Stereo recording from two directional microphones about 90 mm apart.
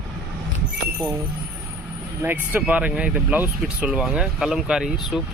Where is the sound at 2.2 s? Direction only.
20° right (ahead or behind).